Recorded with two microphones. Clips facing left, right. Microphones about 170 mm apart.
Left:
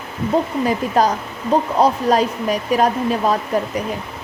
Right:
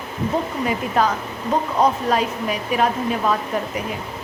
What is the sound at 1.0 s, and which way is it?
A woman's voice, 40° left (ahead or behind).